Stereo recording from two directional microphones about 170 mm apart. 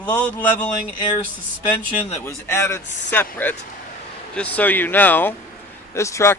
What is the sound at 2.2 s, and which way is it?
Speech, 15° left (ahead or behind).